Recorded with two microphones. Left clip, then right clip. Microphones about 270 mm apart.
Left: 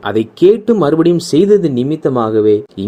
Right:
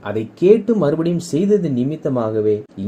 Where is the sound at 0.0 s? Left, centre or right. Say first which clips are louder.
Left 7 dB; left.